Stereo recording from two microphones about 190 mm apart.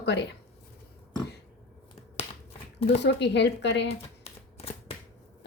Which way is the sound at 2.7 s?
30° left (ahead or behind).